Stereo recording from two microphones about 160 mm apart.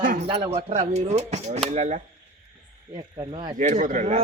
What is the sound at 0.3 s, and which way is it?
Speech, 40° right (ahead or behind).